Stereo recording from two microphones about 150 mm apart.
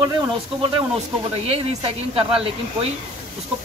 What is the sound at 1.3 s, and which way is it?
Speech, 40° right (ahead or behind).